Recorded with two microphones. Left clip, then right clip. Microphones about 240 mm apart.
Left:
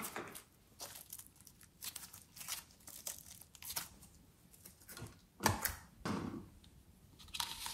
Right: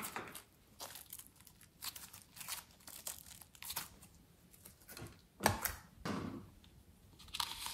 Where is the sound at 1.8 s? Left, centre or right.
Centre.